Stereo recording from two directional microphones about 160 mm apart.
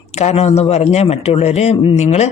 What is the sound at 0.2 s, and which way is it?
A man's voice, 45° left (ahead or behind).